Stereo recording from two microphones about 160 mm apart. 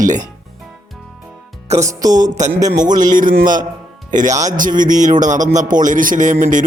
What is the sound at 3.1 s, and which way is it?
A man's voice, 55° right (ahead or behind).